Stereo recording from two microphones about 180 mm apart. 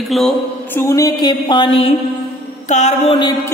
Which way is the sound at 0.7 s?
15° left (ahead or behind).